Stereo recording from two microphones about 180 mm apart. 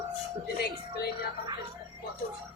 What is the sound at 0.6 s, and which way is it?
Speech, 60° left (ahead or behind).